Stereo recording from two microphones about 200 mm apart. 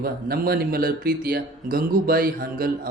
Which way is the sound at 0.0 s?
50° right (ahead or behind).